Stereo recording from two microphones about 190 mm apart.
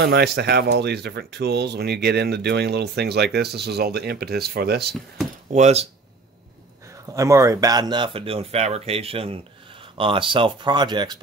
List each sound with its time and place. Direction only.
0.0 s speech: 60° right (ahead or behind)
5.5 s speech: 35° right (ahead or behind)
7.1 s speech: 15° right (ahead or behind)